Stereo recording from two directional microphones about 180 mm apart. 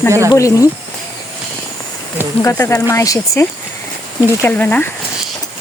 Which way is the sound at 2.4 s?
15° left (ahead or behind).